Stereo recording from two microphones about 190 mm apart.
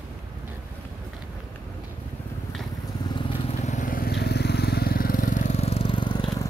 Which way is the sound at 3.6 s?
40° left (ahead or behind).